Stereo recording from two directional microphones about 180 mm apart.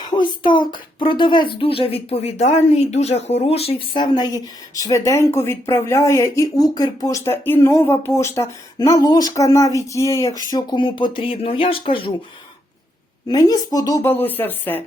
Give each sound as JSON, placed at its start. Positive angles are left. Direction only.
{"t": 0.0, "sound": "speech", "side_deg": 25}
{"t": 13.2, "sound": "speech", "side_deg": 20}